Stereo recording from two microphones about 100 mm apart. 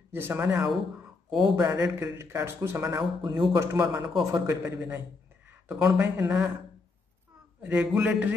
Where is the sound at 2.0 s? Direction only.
25° right (ahead or behind).